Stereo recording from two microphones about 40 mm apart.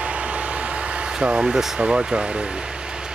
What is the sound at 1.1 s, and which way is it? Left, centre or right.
Speech, right.